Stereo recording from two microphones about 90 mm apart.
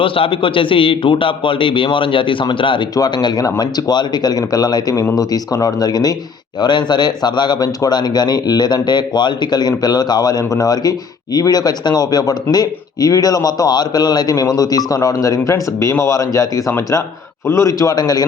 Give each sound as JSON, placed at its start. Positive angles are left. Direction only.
{"t": 0.0, "sound": "speech", "side_deg": 75}
{"t": 2.9, "sound": "a man's voice", "side_deg": 50}